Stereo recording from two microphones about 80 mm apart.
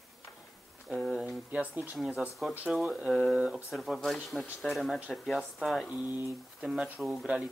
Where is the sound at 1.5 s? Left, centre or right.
Centre.